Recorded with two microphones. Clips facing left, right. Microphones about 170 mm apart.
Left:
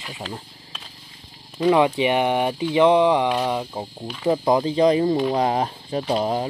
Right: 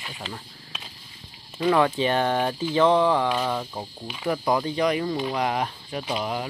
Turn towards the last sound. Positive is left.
turn(degrees=30)  # may be behind; listen again after turning